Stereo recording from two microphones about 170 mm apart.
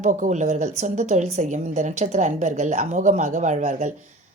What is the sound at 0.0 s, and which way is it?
A woman's voice, 45° right (ahead or behind).